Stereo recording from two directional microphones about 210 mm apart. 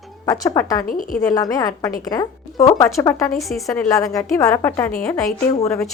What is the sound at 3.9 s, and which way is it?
Speech, 15° left (ahead or behind).